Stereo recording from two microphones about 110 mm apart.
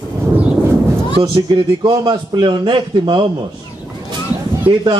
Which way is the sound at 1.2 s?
45° right (ahead or behind).